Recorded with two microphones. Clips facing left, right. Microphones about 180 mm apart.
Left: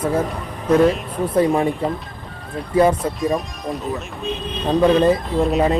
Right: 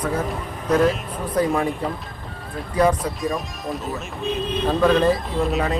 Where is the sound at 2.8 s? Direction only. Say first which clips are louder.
Left 3 dB; 25° left (ahead or behind).